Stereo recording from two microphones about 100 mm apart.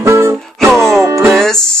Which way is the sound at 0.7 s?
5° left (ahead or behind).